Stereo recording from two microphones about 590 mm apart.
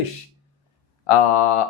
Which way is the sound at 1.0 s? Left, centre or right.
Left.